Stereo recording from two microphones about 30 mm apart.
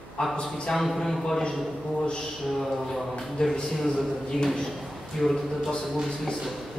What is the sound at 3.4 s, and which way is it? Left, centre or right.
Speech, left.